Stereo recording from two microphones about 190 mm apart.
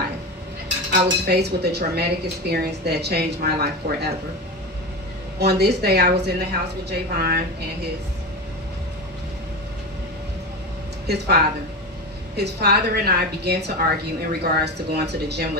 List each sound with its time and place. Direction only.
0.9 s a woman's voice: 60° right (ahead or behind)
5.4 s a woman's voice: 60° right (ahead or behind)
11.1 s a woman's voice: 60° right (ahead or behind)